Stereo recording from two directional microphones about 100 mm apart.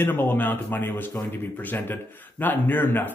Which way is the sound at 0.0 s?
20° left (ahead or behind).